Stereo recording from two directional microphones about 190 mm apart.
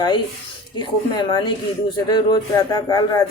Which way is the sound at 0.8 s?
25° left (ahead or behind).